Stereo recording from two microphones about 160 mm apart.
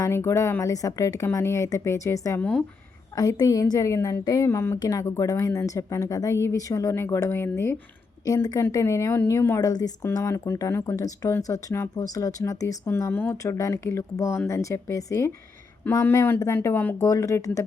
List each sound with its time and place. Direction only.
0.0 s a woman's voice: 15° left (ahead or behind)
2.4 s speech: 5° left (ahead or behind)
3.2 s a woman's voice: 20° left (ahead or behind)